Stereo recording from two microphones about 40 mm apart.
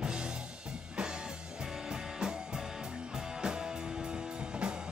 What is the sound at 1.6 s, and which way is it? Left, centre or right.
Music, centre.